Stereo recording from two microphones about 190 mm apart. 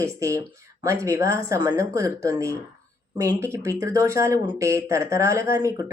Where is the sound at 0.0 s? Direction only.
15° right (ahead or behind).